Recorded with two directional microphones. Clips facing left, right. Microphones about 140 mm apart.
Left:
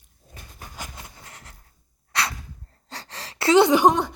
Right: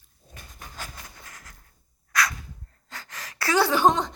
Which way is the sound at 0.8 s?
25° left (ahead or behind).